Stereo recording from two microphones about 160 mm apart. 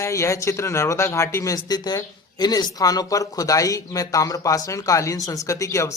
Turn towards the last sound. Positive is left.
turn(degrees=20)  # may be behind; listen again after turning